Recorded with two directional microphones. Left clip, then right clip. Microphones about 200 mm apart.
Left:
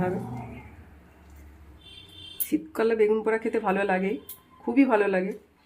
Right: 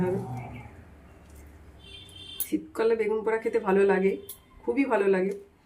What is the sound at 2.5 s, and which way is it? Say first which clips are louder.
Speech: even; 45° left (ahead or behind).